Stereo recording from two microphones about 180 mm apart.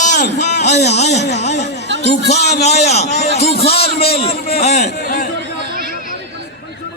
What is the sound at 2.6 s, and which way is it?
Speech, 35° left (ahead or behind).